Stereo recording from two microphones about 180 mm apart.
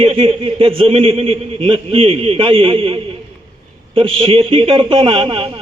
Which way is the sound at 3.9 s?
30° right (ahead or behind).